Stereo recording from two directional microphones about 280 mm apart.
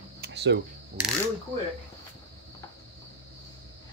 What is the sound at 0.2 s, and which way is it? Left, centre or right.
Camera, right.